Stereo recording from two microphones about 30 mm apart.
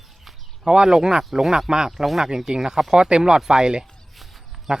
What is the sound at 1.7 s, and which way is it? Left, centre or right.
Speech, right.